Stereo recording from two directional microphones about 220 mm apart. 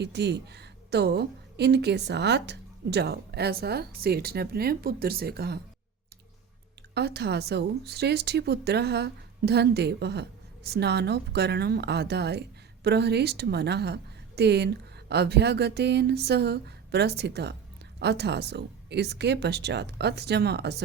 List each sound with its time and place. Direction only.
0.0 s a woman's voice: 50° right (ahead or behind)
6.9 s a woman's voice: 50° right (ahead or behind)